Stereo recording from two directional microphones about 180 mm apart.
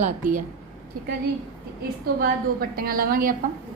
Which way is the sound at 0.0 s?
45° right (ahead or behind).